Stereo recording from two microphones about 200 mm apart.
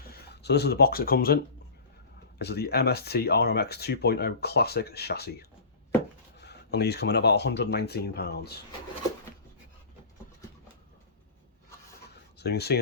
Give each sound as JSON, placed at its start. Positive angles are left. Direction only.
{"t": 0.1, "sound": "speech", "side_deg": 55}
{"t": 2.4, "sound": "speech", "side_deg": 55}
{"t": 12.4, "sound": "speech", "side_deg": 55}